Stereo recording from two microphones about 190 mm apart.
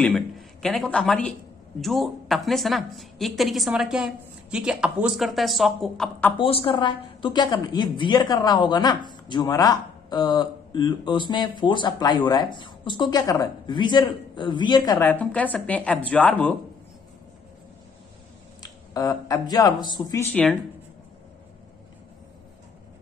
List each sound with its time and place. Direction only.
0.0 s a woman's voice: 5° left (ahead or behind)
6.3 s a woman's voice: 25° left (ahead or behind)
15.0 s a woman's voice: 10° left (ahead or behind)
18.6 s speech: 20° left (ahead or behind)